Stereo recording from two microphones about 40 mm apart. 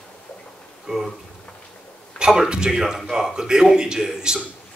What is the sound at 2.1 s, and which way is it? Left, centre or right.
A man's voice, centre.